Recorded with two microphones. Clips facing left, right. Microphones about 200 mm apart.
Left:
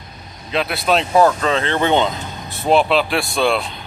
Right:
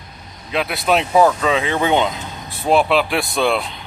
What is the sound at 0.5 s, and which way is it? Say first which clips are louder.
Speech: even; 10° right (ahead or behind).